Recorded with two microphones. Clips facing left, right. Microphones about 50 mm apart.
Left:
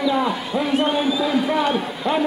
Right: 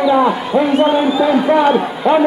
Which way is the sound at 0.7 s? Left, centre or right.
Centre.